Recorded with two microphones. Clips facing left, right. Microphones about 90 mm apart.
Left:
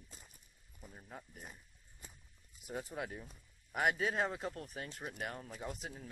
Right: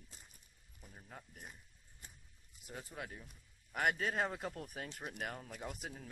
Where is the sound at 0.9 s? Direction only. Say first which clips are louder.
Left 2 dB; 15° left (ahead or behind).